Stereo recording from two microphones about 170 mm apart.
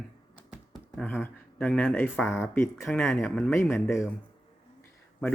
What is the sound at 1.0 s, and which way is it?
Speech, 10° left (ahead or behind).